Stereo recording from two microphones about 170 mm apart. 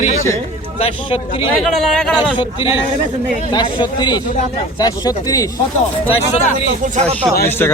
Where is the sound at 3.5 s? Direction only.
25° left (ahead or behind).